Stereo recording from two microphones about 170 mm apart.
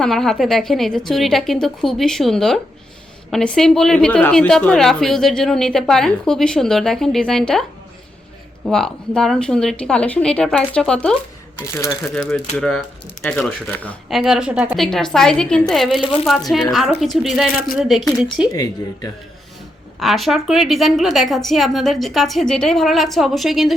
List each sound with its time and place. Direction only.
0.0 s a woman's voice: 5° left (ahead or behind)
8.6 s a woman's voice: 5° left (ahead or behind)
11.7 s speech: 15° left (ahead or behind)
12.2 s a woman's voice: 5° left (ahead or behind)
18.5 s speech: 20° left (ahead or behind)
20.0 s a woman's voice: centre (ahead or behind)